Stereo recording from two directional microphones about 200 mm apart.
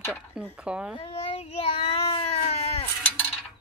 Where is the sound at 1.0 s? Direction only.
30° left (ahead or behind).